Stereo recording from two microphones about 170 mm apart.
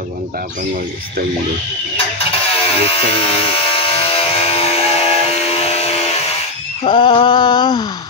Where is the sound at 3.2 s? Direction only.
35° left (ahead or behind).